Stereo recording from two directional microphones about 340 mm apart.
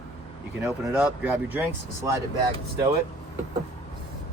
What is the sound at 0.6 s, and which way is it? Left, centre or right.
Speech, centre.